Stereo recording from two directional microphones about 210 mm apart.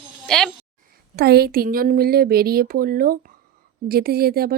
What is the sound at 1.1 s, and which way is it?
Speech, 50° right (ahead or behind).